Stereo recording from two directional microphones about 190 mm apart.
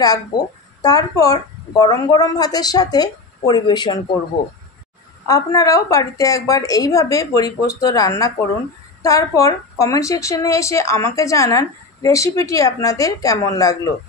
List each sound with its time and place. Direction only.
0.8 s a woman's voice: 20° left (ahead or behind)
5.2 s a woman's voice: 20° left (ahead or behind)